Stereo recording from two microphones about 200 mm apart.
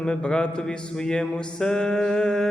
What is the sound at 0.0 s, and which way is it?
Music, 5° left (ahead or behind).